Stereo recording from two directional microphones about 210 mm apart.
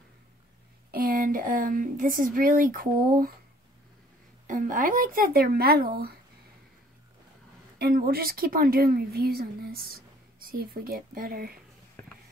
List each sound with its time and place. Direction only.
0.9 s speech: 45° right (ahead or behind)
4.5 s speech: 40° right (ahead or behind)
7.8 s speech: 45° right (ahead or behind)
12.0 s a sound: 10° left (ahead or behind)